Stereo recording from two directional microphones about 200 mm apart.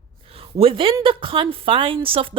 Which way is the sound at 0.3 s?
30° right (ahead or behind).